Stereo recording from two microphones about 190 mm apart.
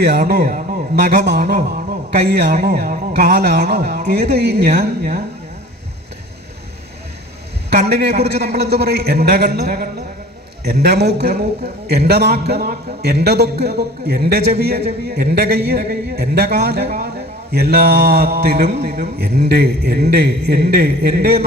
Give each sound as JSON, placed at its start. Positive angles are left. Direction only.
{"t": 0.0, "sound": "a man's voice", "side_deg": -60}
{"t": 7.7, "sound": "a man's voice", "side_deg": -60}